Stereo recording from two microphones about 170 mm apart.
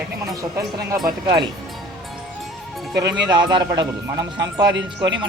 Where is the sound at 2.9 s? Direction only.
25° right (ahead or behind).